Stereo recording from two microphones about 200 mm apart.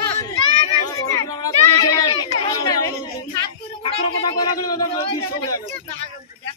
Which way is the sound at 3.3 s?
25° left (ahead or behind).